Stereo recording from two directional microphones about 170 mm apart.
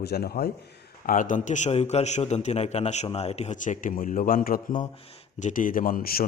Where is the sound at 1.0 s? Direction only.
50° left (ahead or behind).